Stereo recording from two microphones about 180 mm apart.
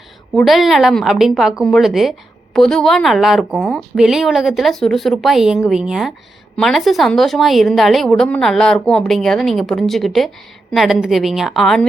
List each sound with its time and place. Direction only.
0.3 s a woman's voice: centre (ahead or behind)